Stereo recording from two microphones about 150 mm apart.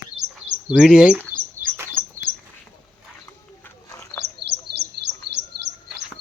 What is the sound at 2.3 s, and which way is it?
Bird, 35° right (ahead or behind).